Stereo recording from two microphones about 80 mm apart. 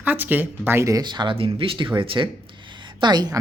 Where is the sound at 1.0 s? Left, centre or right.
Right.